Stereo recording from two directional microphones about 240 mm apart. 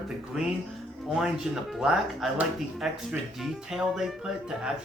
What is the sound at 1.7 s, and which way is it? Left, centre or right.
Speech, centre.